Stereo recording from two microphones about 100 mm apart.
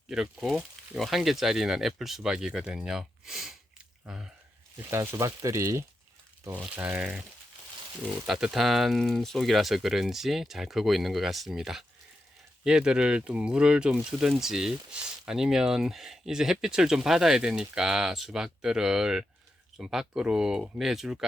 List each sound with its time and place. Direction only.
0.1 s speech: 5° right (ahead or behind)
4.9 s speech: 30° right (ahead or behind)
6.7 s speech: 15° right (ahead or behind)
8.3 s speech: 5° right (ahead or behind)